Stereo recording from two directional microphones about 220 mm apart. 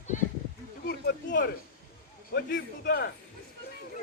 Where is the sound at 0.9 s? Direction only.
45° left (ahead or behind).